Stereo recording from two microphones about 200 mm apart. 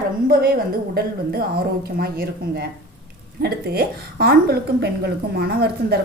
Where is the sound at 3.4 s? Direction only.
50° right (ahead or behind).